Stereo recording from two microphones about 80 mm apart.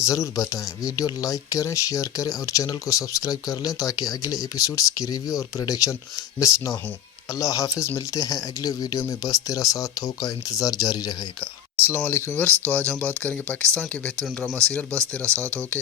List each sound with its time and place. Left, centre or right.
0.0 s speech: left
11.9 s speech: left